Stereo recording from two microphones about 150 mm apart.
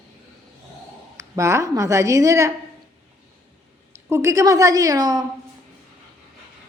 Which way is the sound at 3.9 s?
20° right (ahead or behind).